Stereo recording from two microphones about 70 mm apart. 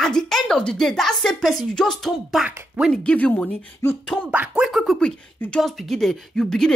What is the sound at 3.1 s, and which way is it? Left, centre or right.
Speech, left.